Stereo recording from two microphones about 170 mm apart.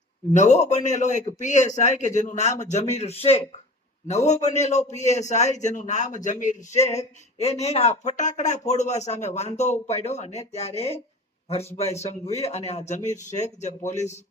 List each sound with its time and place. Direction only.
0.3 s a man's voice: 45° left (ahead or behind)
6.7 s a sound: 15° left (ahead or behind)
7.3 s a man's voice: 40° left (ahead or behind)